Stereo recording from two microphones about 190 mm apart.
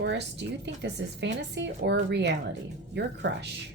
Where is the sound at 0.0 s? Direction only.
65° right (ahead or behind).